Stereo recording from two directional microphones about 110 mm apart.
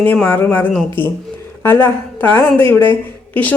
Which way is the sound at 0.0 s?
15° left (ahead or behind).